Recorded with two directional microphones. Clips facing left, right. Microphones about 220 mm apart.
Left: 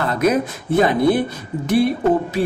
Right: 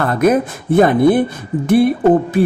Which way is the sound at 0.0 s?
55° right (ahead or behind).